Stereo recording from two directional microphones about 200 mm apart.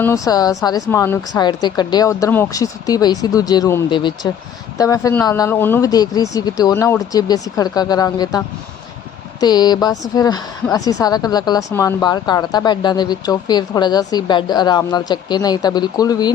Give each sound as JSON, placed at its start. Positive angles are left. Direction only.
{"t": 0.0, "sound": "a woman's voice", "side_deg": 15}